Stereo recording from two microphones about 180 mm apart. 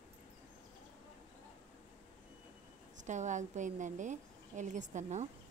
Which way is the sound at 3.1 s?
40° right (ahead or behind).